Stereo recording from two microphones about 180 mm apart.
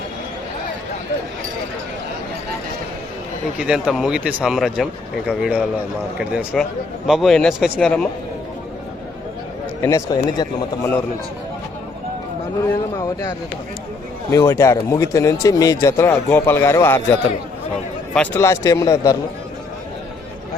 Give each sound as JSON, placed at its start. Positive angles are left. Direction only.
{"t": 3.6, "sound": "speech", "side_deg": -5}
{"t": 9.8, "sound": "speech", "side_deg": 20}
{"t": 13.0, "sound": "speech", "side_deg": 20}